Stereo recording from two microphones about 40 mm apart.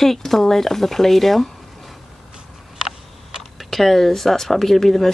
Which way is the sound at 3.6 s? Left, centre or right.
Centre.